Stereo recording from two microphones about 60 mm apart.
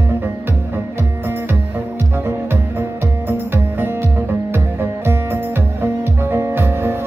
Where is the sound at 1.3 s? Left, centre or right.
Right.